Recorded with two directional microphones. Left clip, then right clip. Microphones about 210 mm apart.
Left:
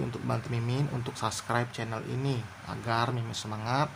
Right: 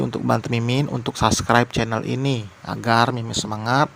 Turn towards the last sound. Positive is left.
turn(degrees=-35)  # may be behind; listen again after turning